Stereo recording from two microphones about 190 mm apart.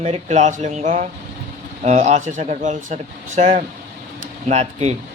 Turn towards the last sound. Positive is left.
turn(degrees=-35)  # may be behind; listen again after turning